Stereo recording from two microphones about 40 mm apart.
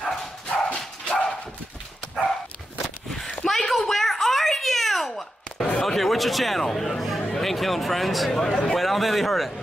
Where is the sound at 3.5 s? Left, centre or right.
Centre.